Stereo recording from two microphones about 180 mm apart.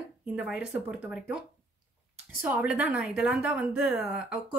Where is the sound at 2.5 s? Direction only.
10° right (ahead or behind).